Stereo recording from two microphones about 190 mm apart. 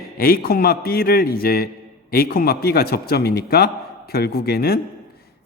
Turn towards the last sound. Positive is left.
turn(degrees=55)  # may be behind; listen again after turning